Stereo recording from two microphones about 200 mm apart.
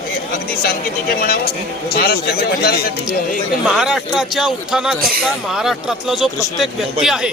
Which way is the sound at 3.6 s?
5° right (ahead or behind).